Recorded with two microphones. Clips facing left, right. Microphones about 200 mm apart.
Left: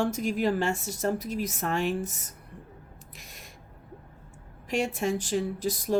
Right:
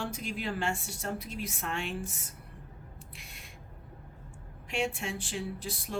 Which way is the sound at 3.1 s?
40° left (ahead or behind).